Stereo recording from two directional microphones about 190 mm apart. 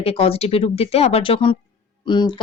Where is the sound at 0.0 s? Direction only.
30° left (ahead or behind).